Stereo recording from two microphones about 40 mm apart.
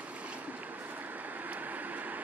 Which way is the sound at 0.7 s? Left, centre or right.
Right.